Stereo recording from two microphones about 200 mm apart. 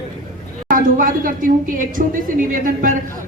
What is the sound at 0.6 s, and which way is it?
A woman's voice, 45° right (ahead or behind).